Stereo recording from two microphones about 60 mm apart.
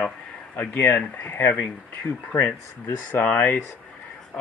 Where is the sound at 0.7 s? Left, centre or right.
Left.